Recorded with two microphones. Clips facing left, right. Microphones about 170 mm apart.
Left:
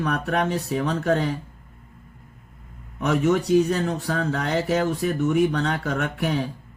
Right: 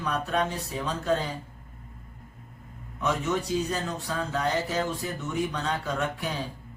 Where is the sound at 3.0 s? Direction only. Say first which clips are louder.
Left 7 dB; 65° left (ahead or behind).